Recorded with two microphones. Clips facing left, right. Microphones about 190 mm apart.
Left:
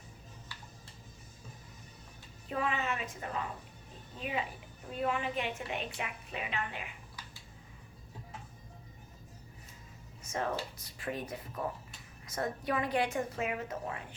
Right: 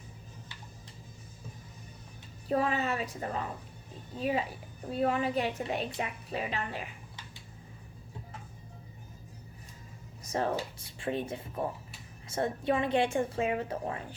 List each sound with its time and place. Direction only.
2.5 s a woman's voice: 35° right (ahead or behind)
10.2 s a woman's voice: 35° right (ahead or behind)